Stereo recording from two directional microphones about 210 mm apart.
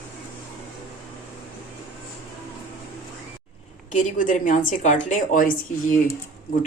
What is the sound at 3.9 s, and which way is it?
A woman's voice, 35° left (ahead or behind).